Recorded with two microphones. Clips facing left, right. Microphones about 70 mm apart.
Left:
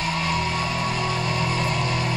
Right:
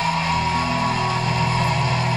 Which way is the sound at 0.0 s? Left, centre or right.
Right.